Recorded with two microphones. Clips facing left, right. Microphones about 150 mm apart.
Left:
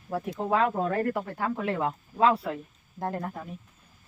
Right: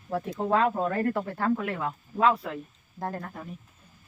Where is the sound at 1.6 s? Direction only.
30° left (ahead or behind).